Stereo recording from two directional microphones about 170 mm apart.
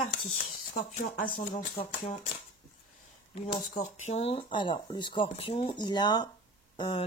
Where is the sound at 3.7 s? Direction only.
40° left (ahead or behind).